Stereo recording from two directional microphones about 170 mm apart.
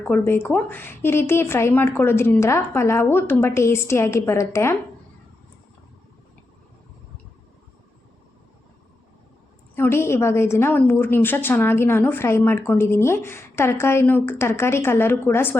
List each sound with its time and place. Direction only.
0.0 s a woman's voice: 10° left (ahead or behind)
9.7 s a woman's voice: 15° left (ahead or behind)